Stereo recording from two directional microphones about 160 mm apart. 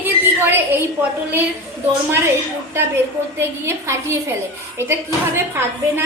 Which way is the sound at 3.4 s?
15° right (ahead or behind).